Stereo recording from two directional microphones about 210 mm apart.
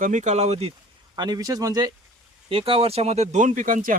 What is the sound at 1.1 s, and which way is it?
Speech, 20° right (ahead or behind).